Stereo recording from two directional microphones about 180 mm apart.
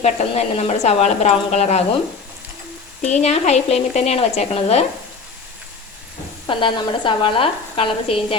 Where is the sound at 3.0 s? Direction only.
40° left (ahead or behind).